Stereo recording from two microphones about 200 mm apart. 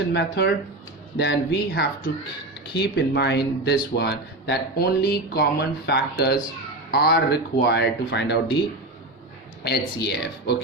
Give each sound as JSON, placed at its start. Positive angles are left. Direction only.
{"t": 0.1, "sound": "speech", "side_deg": 55}
{"t": 9.6, "sound": "speech", "side_deg": 55}